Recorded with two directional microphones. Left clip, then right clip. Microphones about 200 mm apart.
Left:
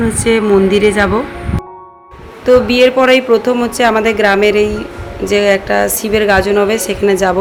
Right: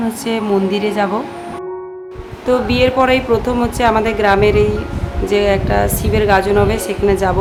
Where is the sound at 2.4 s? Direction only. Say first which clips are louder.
Left 6 dB; 15° left (ahead or behind).